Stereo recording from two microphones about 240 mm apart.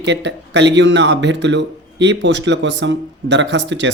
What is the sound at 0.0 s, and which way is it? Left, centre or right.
Speech, right.